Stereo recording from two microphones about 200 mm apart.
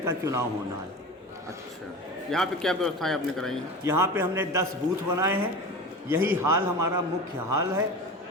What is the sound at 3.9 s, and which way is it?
A man's voice, 10° right (ahead or behind).